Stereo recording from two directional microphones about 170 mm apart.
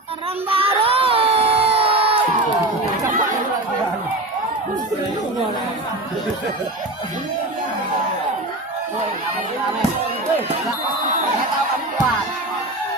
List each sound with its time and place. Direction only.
0.5 s crowd: 35° right (ahead or behind)